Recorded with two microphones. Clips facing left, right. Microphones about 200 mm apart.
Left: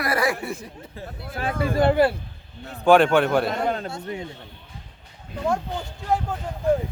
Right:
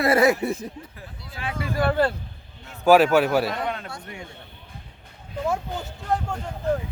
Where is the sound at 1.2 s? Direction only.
50° left (ahead or behind).